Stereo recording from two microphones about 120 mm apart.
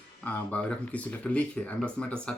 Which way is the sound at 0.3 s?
10° left (ahead or behind).